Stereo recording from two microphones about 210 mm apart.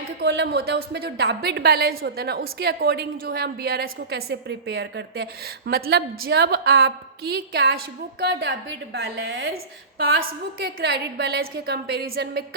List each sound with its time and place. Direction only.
0.2 s a woman's voice: 50° right (ahead or behind)
10.6 s a woman's voice: 50° right (ahead or behind)